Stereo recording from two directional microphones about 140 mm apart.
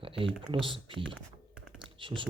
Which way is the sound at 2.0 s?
35° right (ahead or behind).